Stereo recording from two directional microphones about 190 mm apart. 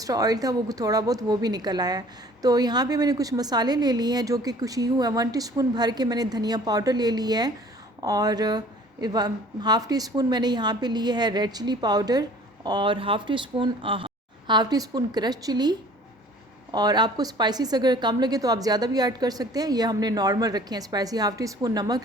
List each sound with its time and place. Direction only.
0.0 s speech: 20° right (ahead or behind)
16.7 s speech: 20° right (ahead or behind)